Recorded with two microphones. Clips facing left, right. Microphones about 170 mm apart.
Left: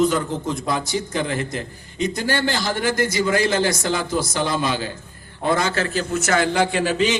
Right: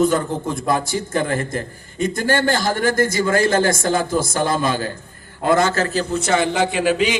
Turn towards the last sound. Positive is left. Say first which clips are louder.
# right 2 dB
turn(degrees=-15)  # may be behind; listen again after turning